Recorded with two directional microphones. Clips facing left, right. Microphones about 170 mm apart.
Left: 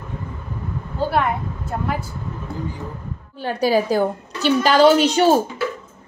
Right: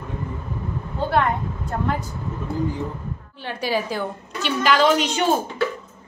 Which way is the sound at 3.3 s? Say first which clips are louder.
Left 7 dB; 40° left (ahead or behind).